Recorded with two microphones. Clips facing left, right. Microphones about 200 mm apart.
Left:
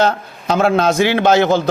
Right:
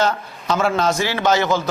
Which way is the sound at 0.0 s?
60° left (ahead or behind).